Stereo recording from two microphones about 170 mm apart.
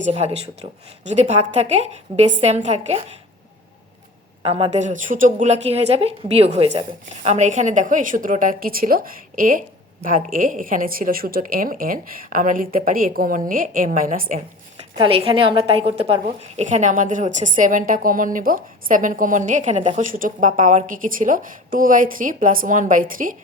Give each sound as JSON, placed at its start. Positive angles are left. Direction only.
{"t": 0.0, "sound": "a woman's voice", "side_deg": -40}
{"t": 4.4, "sound": "a woman's voice", "side_deg": -35}
{"t": 14.9, "sound": "a woman's voice", "side_deg": -30}